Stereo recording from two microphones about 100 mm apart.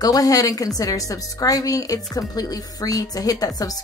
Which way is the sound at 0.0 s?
40° left (ahead or behind).